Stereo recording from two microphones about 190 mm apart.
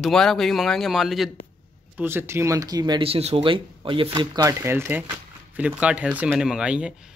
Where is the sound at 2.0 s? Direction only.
10° right (ahead or behind).